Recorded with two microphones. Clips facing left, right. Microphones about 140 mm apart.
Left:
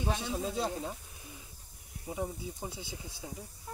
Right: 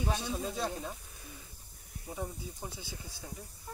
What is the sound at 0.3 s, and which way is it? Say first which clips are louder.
Speech: left 2 dB; 15° left (ahead or behind).